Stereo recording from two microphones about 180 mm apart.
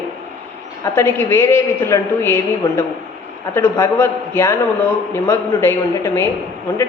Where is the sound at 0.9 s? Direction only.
15° left (ahead or behind).